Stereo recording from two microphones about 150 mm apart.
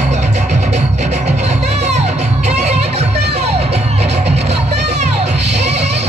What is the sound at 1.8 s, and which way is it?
Music, 45° right (ahead or behind).